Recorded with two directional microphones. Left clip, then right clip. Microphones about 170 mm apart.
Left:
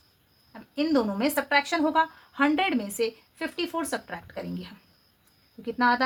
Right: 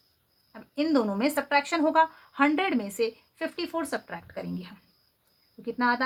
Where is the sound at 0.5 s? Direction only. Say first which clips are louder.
Even; 25° right (ahead or behind).